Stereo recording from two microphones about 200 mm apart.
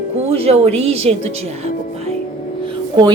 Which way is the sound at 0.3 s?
30° right (ahead or behind).